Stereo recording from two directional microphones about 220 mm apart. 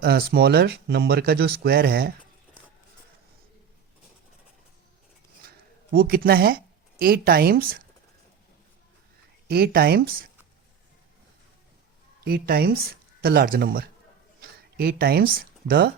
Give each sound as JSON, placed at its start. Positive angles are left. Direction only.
{"t": 0.0, "sound": "speech", "side_deg": -45}
{"t": 5.9, "sound": "speech", "side_deg": -45}
{"t": 9.5, "sound": "speech", "side_deg": -45}
{"t": 12.2, "sound": "speech", "side_deg": -45}